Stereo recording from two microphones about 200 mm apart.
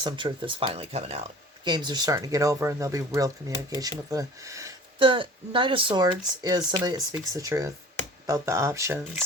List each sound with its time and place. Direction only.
0.0 s speech: 25° right (ahead or behind)